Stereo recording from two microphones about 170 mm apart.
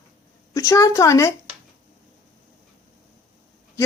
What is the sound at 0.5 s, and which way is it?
Speech, 20° left (ahead or behind).